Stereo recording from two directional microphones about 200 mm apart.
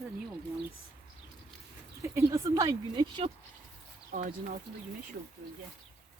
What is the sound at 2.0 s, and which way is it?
Speech, 15° right (ahead or behind).